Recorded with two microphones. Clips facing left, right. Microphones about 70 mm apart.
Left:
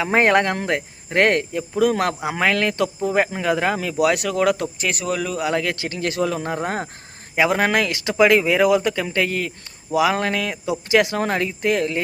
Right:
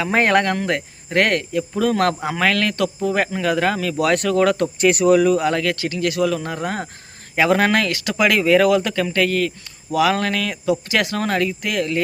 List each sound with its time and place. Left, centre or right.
0.0 s speech: left
1.7 s speech: centre
2.3 s speech: left; by 5.5 s centre
5.5 s speech: centre
7.3 s speech: centre
8.2 s speech: left